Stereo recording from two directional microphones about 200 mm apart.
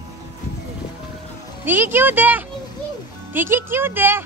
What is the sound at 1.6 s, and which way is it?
Speech, 10° right (ahead or behind).